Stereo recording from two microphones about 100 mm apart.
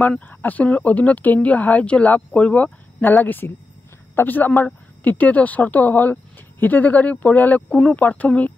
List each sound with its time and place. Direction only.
0.0 s speech: 15° left (ahead or behind)